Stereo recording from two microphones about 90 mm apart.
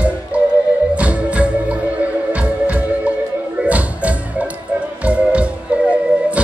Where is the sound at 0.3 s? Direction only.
15° right (ahead or behind).